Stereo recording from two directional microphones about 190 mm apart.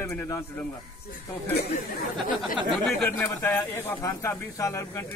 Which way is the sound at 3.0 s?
15° left (ahead or behind).